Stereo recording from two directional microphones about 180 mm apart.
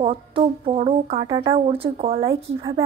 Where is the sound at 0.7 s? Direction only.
35° right (ahead or behind).